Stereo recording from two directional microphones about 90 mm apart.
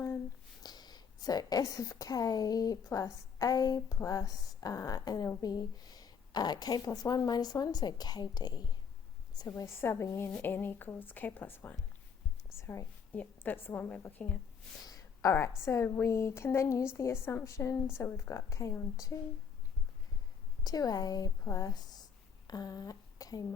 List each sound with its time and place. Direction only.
0.6 s a woman's voice: 50° left (ahead or behind)
9.5 s a woman's voice: 30° left (ahead or behind)
15.3 s a woman's voice: 30° left (ahead or behind)
20.7 s a woman's voice: 45° left (ahead or behind)